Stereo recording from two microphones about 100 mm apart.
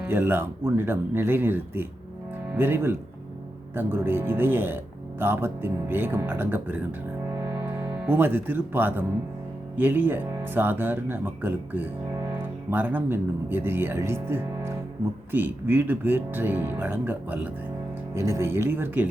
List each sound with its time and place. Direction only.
0.0 s speech: 20° right (ahead or behind)
18.1 s speech: 30° right (ahead or behind)